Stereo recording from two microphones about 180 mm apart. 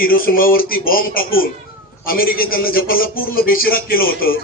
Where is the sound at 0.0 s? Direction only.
55° left (ahead or behind).